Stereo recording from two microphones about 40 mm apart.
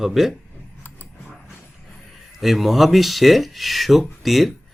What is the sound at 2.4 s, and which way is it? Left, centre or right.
Speech, centre.